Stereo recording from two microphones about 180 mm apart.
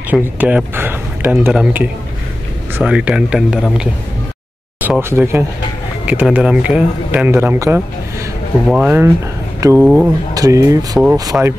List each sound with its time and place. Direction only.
0.1 s a man's voice: 10° right (ahead or behind)